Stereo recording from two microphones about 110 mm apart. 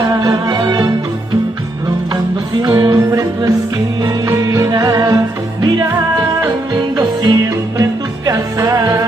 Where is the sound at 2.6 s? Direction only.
40° right (ahead or behind).